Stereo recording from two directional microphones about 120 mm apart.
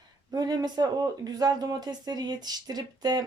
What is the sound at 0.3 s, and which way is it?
Speech, 35° right (ahead or behind).